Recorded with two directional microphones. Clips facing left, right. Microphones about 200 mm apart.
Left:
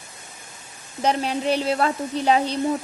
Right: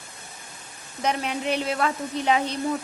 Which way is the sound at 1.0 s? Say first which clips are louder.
Left 4 dB; 30° left (ahead or behind).